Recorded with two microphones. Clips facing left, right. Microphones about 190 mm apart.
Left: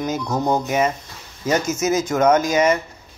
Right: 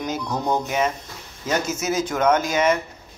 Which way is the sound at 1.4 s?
45° left (ahead or behind).